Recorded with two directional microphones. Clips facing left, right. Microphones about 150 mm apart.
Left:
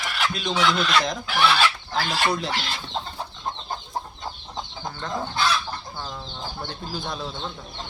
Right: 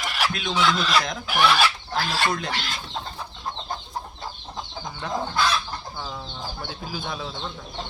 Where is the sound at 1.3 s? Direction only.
10° right (ahead or behind).